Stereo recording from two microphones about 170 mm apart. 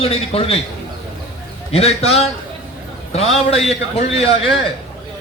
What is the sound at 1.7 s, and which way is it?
Speech, 35° left (ahead or behind).